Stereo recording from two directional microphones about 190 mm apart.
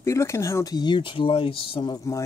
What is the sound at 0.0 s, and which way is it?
Speech, 15° left (ahead or behind).